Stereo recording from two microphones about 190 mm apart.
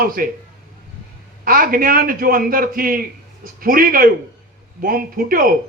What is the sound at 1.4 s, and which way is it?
A man's voice, 50° right (ahead or behind).